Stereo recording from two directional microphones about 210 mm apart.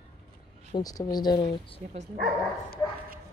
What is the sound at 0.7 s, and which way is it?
Speech, 20° left (ahead or behind).